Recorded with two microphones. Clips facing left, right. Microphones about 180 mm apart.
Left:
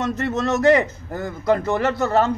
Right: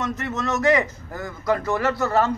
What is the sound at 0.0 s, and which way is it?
A man's voice, 30° left (ahead or behind).